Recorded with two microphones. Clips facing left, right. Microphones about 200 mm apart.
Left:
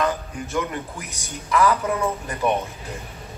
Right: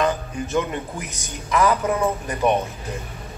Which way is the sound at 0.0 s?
20° right (ahead or behind).